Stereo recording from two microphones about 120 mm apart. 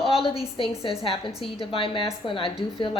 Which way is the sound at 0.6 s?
50° left (ahead or behind).